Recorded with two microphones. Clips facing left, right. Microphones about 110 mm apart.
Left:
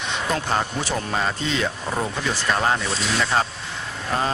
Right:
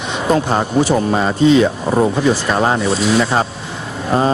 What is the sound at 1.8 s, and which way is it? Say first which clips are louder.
Speech: right 11 dB; 35° right (ahead or behind).